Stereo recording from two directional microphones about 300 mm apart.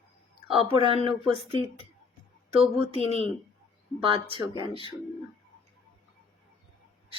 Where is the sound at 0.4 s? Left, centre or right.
Centre.